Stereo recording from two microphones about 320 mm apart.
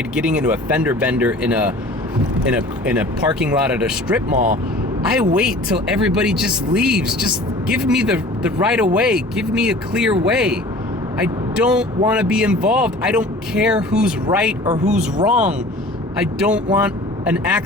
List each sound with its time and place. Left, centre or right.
0.1 s speech: centre
4.4 s speech: right
5.3 s speech: centre